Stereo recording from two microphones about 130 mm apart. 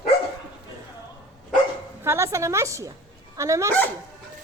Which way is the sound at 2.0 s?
20° right (ahead or behind).